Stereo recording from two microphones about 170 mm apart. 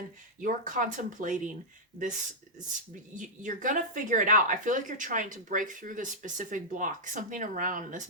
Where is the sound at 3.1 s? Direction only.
50° right (ahead or behind).